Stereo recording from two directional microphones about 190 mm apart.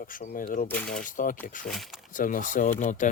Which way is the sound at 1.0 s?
45° left (ahead or behind).